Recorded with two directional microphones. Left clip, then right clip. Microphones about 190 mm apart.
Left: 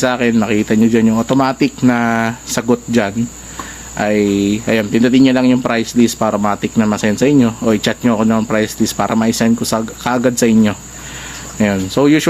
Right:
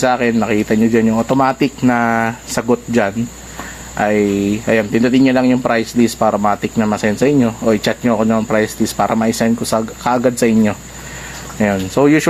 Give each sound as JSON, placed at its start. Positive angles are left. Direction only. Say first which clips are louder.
{"t": 0.0, "sound": "speech", "louder": "even", "side_deg": 25}